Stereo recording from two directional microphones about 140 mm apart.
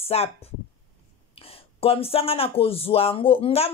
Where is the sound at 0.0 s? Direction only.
45° left (ahead or behind).